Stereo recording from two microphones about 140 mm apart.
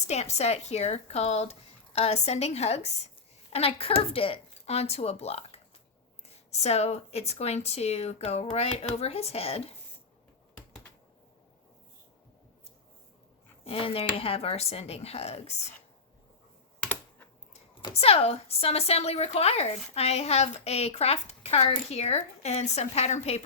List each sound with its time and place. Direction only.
0.1 s a woman's voice: 50° left (ahead or behind)
13.7 s a woman's voice: 40° left (ahead or behind)
16.8 s computer keyboard: 15° left (ahead or behind)
17.9 s a woman's voice: 45° left (ahead or behind)